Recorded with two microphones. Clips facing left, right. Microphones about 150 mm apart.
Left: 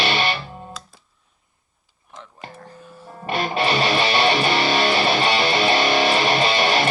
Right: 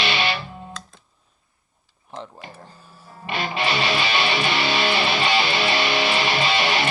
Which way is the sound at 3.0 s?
40° left (ahead or behind).